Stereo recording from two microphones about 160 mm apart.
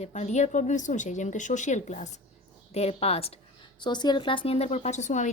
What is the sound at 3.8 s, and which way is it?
A woman's voice, 25° left (ahead or behind).